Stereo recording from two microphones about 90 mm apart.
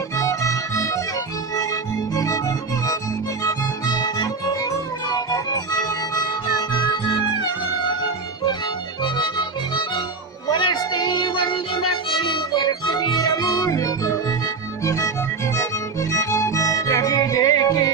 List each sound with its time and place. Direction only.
0.2 s music: 35° left (ahead or behind)
2.1 s music: 40° left (ahead or behind)
3.4 s music: 45° left (ahead or behind)
6.7 s music: 60° left (ahead or behind); by 14.1 s 40° left (ahead or behind)
15.5 s music: 35° left (ahead or behind)